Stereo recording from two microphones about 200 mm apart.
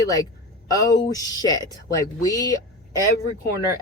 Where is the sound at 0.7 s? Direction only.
20° left (ahead or behind).